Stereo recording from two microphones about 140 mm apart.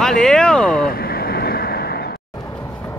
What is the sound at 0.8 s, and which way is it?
Vehicle, 90° left.